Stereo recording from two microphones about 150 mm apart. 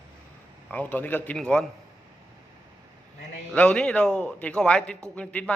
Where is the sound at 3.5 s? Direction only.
5° left (ahead or behind).